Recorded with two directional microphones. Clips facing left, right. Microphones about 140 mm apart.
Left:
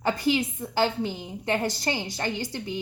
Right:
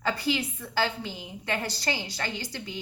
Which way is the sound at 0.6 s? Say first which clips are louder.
Left 4 dB; 20° left (ahead or behind).